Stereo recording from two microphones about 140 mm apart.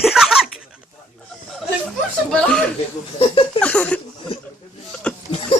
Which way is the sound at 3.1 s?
40° left (ahead or behind).